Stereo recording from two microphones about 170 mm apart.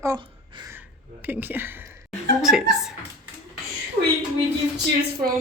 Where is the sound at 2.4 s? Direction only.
5° right (ahead or behind).